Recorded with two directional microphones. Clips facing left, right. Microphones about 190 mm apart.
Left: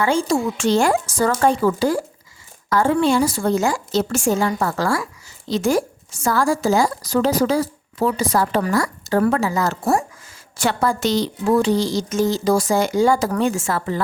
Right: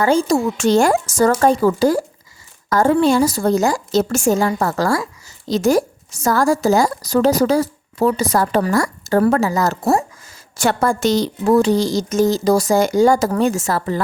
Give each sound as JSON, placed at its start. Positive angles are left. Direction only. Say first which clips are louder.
{"t": 0.0, "sound": "speech", "louder": "right 3 dB", "side_deg": -40}